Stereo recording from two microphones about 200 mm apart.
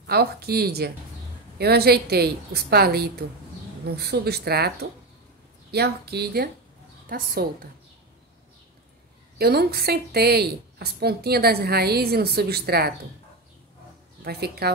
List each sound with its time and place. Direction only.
0.0 s a woman's voice: 50° right (ahead or behind)
9.4 s a woman's voice: 50° right (ahead or behind)
14.2 s a woman's voice: 50° right (ahead or behind)